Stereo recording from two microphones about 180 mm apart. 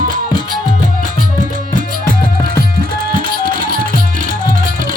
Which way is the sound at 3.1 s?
50° right (ahead or behind).